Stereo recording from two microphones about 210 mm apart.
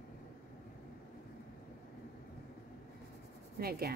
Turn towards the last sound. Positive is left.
turn(degrees=-45)  # may be behind; listen again after turning